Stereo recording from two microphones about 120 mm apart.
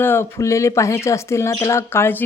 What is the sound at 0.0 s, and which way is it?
Speech, 20° left (ahead or behind).